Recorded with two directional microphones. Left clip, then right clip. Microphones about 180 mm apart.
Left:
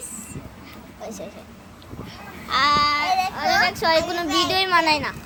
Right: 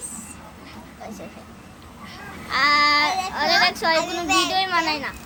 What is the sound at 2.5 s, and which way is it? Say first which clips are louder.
Speech: even; 10° left (ahead or behind).